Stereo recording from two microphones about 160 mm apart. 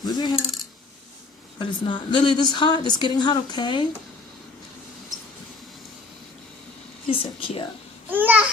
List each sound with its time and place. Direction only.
0.0 s a woman's voice: 25° left (ahead or behind)
1.5 s a woman's voice: 30° left (ahead or behind)
7.1 s a woman's voice: 35° left (ahead or behind)
8.1 s babbling: 10° right (ahead or behind)